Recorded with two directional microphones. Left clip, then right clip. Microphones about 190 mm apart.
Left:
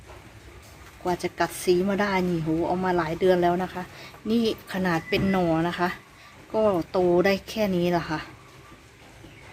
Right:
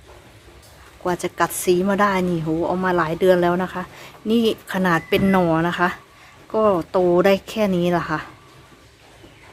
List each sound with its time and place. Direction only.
1.0 s a woman's voice: 15° right (ahead or behind)